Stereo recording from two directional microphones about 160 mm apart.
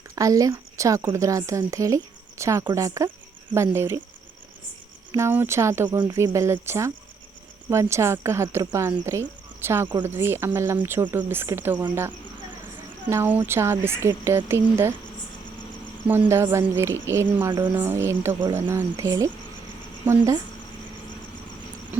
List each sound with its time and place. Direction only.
0.2 s a woman's voice: 20° right (ahead or behind)
5.1 s speech: 15° right (ahead or behind)
13.1 s speech: 15° right (ahead or behind)
16.3 s a woman's voice: 15° right (ahead or behind)